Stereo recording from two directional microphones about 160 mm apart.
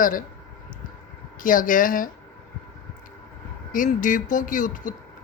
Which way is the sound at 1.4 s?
55° left (ahead or behind).